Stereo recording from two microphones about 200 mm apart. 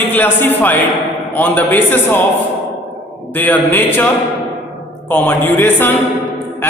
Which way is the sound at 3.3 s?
10° left (ahead or behind).